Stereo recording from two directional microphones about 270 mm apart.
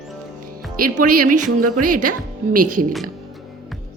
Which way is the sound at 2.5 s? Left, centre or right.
Right.